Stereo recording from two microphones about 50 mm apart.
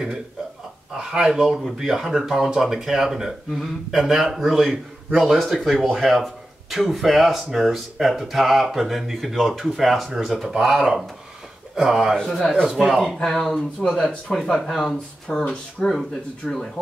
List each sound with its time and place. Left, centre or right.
0.9 s speech: centre
12.2 s speech: centre
13.7 s speech: centre
14.3 s speech: centre
15.9 s speech: centre